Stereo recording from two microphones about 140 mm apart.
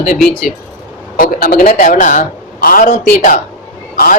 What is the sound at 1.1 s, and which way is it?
Speech, 90° left.